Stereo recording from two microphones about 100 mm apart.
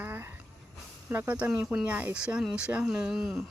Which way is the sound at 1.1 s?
15° right (ahead or behind).